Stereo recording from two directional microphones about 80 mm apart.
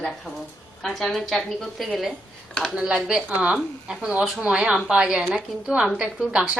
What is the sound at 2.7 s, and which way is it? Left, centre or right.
A woman's voice, centre.